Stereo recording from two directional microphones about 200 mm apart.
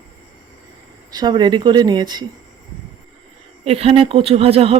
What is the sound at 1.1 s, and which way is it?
A woman's voice, 20° right (ahead or behind).